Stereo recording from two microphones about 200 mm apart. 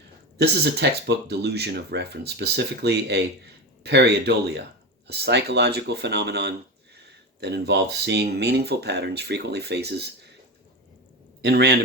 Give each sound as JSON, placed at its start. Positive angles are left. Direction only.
{"t": 0.3, "sound": "speech", "side_deg": -55}
{"t": 11.4, "sound": "speech", "side_deg": -55}